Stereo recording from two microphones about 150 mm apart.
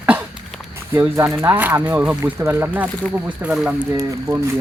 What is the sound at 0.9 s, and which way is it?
Speech, 15° right (ahead or behind).